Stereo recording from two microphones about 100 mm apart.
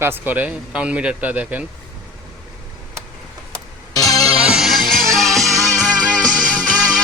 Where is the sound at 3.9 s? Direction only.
35° left (ahead or behind).